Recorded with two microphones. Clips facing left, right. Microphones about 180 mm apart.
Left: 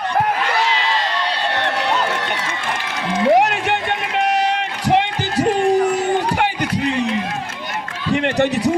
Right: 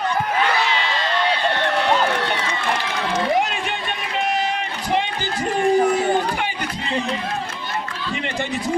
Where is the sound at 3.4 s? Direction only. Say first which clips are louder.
Left 5 dB; 75° left (ahead or behind).